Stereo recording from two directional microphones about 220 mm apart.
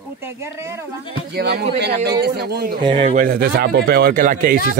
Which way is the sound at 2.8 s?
25° right (ahead or behind).